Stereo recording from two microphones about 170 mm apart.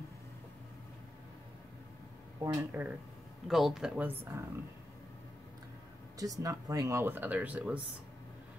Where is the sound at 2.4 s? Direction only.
15° right (ahead or behind).